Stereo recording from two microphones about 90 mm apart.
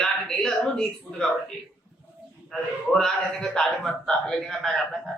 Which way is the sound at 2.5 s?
5° left (ahead or behind).